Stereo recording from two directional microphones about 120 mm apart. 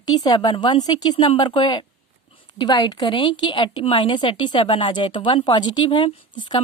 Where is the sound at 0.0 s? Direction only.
35° left (ahead or behind).